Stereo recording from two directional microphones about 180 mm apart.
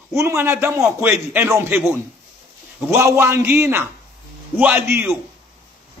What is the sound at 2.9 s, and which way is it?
A man's voice, 15° right (ahead or behind).